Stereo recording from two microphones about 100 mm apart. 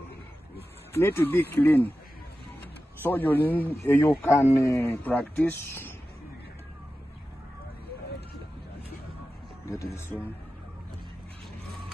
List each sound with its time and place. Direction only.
0.9 s speech: 25° left (ahead or behind)
3.0 s speech: 20° left (ahead or behind)
9.9 s speech: 25° left (ahead or behind)